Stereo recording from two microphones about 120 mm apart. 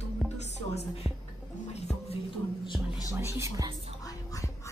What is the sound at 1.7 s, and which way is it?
Music, 60° left (ahead or behind).